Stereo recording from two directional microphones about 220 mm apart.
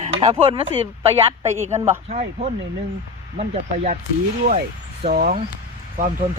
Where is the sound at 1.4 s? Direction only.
10° right (ahead or behind).